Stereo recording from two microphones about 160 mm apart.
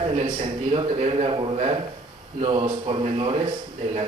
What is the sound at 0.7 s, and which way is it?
A man's voice, 35° right (ahead or behind).